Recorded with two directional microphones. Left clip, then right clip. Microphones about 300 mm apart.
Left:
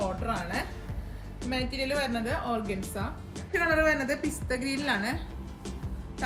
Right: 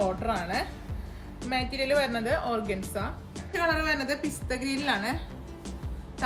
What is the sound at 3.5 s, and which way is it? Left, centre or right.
A woman's voice, centre.